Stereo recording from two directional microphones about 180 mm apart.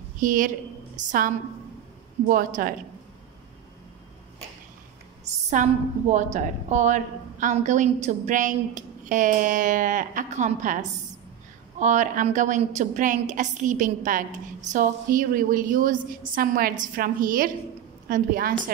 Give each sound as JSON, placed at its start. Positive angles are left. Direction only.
{"t": 0.2, "sound": "a woman's voice", "side_deg": -50}
{"t": 5.2, "sound": "a woman's voice", "side_deg": -40}